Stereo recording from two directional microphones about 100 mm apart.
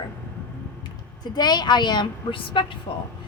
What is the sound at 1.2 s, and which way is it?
Speech, 45° left (ahead or behind).